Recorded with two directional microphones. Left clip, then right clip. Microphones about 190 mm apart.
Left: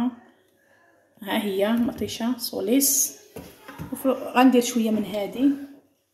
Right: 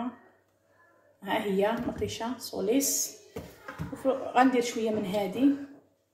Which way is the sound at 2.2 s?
55° left (ahead or behind).